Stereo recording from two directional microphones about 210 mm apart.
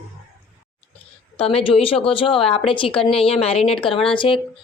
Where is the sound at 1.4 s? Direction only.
25° left (ahead or behind).